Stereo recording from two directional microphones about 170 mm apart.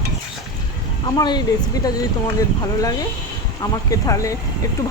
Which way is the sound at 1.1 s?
25° left (ahead or behind).